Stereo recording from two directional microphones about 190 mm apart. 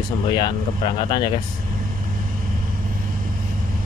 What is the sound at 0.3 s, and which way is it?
Speech, 20° left (ahead or behind).